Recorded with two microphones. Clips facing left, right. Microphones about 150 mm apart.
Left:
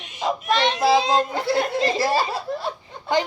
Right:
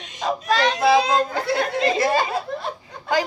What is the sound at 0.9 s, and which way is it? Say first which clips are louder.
Snicker: right 1 dB; 25° left (ahead or behind).